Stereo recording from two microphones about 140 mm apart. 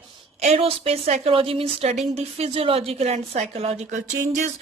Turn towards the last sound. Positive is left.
turn(degrees=-60)  # may be behind; listen again after turning